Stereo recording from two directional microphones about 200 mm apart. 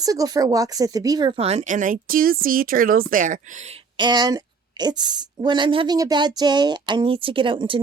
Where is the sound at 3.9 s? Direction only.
20° right (ahead or behind).